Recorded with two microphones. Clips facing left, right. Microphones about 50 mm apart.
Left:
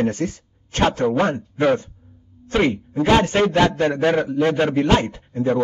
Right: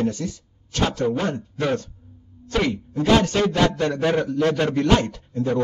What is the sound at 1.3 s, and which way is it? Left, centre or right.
A man's voice, left.